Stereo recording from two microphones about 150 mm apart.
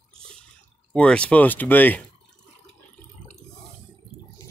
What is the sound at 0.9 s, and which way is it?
Speech, 5° left (ahead or behind).